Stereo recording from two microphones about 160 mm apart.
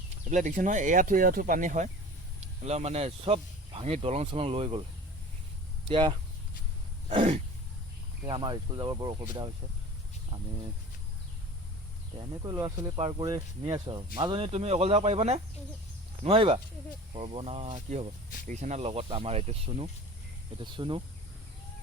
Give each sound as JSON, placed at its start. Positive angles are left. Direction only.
{"t": 0.3, "sound": "speech", "side_deg": -50}
{"t": 5.9, "sound": "speech", "side_deg": -30}
{"t": 7.1, "sound": "speech", "side_deg": -45}
{"t": 8.3, "sound": "speech", "side_deg": -30}
{"t": 12.4, "sound": "speech", "side_deg": -25}
{"t": 17.8, "sound": "speech", "side_deg": -45}